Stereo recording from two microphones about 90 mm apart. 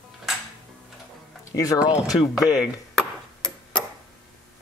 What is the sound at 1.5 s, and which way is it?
Speech, 40° left (ahead or behind).